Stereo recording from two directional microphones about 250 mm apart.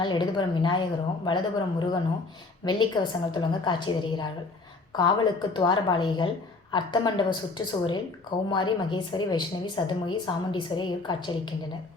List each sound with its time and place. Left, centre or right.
0.0 s a woman's voice: centre